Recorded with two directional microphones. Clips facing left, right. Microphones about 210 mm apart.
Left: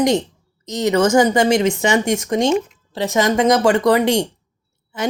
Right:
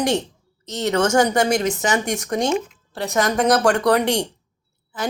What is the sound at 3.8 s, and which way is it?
Speech, 10° left (ahead or behind).